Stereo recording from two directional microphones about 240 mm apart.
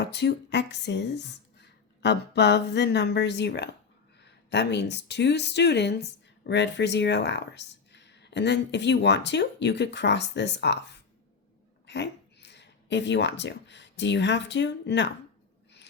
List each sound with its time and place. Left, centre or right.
0.0 s speech: left